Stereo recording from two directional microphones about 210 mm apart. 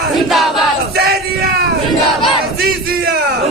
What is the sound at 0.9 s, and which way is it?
Crowd, 50° right (ahead or behind).